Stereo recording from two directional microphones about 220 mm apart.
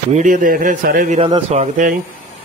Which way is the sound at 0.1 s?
35° right (ahead or behind).